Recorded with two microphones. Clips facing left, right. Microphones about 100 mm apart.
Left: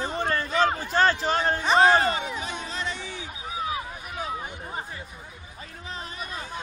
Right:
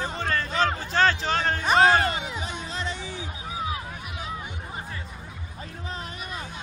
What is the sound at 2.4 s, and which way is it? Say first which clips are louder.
Music: even; 30° right (ahead or behind).